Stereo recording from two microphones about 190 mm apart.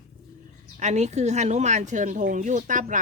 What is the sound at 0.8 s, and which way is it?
Speech, 35° right (ahead or behind).